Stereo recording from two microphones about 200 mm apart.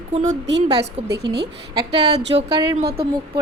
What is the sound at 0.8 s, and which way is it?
Speech, 55° right (ahead or behind).